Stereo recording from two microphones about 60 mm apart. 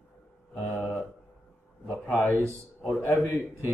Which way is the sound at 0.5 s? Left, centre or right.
Centre.